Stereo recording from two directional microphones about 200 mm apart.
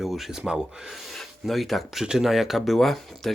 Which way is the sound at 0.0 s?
Centre (ahead or behind).